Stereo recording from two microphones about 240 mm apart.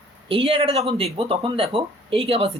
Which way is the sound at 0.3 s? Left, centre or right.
Right.